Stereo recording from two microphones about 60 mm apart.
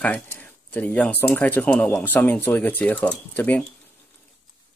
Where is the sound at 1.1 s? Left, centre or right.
Left.